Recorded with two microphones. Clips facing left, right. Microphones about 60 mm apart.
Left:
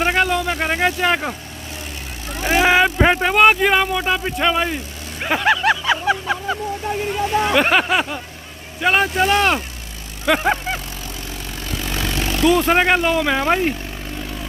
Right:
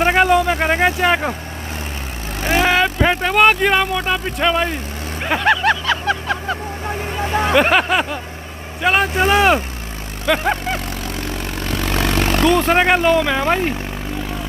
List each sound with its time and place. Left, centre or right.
0.0 s speech: centre
2.4 s speech: centre
5.9 s a sound: centre
7.5 s speech: centre
10.2 s a sound: centre
11.6 s vehicle: right
12.4 s speech: centre